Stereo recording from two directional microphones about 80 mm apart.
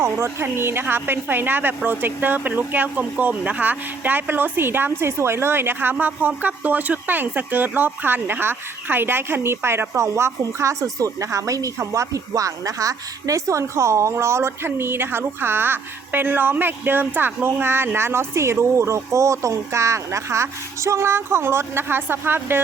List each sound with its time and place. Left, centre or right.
0.0 s a woman's voice: right